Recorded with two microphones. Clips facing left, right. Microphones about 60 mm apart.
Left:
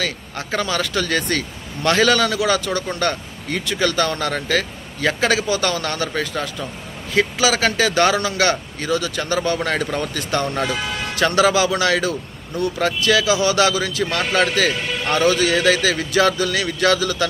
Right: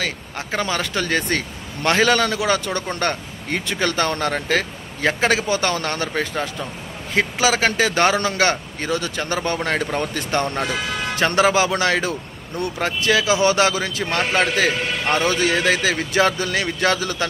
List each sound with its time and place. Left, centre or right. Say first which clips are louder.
0.0 s a man's voice: left 1 dB; right